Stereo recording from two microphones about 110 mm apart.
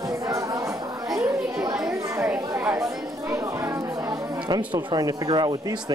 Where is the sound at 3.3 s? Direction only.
25° right (ahead or behind).